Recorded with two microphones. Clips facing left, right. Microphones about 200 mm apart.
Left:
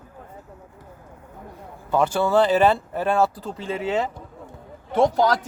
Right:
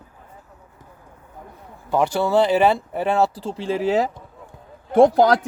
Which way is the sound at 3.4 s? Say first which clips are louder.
Right 4 dB; 30° right (ahead or behind).